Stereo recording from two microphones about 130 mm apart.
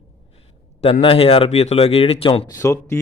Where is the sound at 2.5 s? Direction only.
20° left (ahead or behind).